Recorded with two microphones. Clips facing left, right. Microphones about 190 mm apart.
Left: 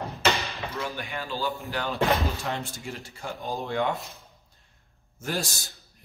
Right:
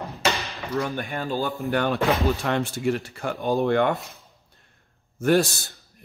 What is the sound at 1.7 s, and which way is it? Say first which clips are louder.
Speech: right 8 dB; 60° right (ahead or behind).